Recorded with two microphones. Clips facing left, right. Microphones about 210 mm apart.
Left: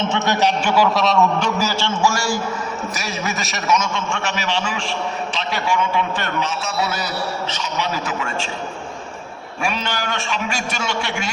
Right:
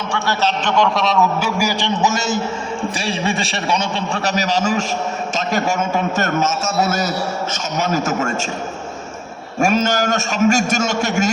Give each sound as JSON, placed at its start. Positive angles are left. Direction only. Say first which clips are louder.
{"t": 0.0, "sound": "a man's voice", "louder": "left 2 dB", "side_deg": 20}
{"t": 9.6, "sound": "a man's voice", "louder": "right 8 dB", "side_deg": -45}